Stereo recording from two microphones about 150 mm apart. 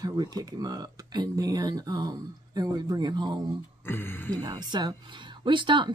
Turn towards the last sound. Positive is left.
turn(degrees=-30)  # may be behind; listen again after turning